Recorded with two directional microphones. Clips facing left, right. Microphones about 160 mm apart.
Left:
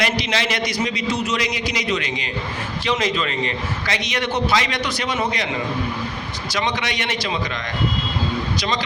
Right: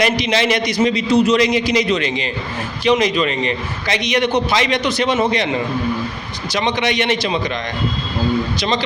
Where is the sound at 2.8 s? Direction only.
15° right (ahead or behind).